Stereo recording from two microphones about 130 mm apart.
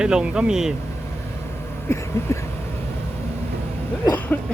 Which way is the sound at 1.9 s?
20° left (ahead or behind).